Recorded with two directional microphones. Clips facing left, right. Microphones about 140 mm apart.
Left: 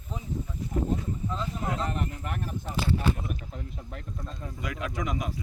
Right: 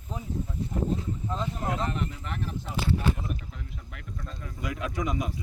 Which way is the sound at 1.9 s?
50° left (ahead or behind).